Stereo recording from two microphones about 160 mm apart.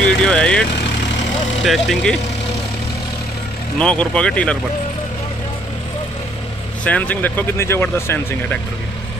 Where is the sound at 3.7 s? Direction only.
5° left (ahead or behind).